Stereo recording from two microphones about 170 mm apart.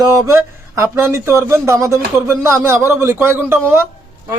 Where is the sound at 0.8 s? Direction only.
15° right (ahead or behind).